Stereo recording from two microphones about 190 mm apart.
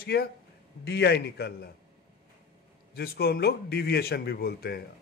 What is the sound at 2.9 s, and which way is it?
A man's voice, 55° left (ahead or behind).